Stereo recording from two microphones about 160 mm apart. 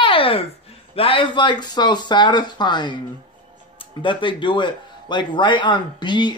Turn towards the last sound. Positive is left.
turn(degrees=30)  # may be behind; listen again after turning